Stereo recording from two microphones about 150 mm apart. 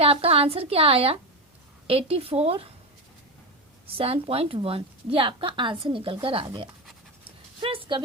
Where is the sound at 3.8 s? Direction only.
40° right (ahead or behind).